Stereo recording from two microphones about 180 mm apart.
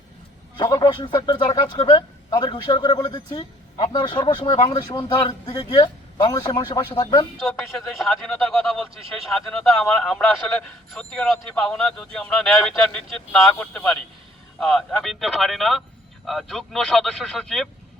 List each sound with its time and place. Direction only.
0.5 s a man's voice: 25° left (ahead or behind)
7.4 s a man's voice: centre (ahead or behind)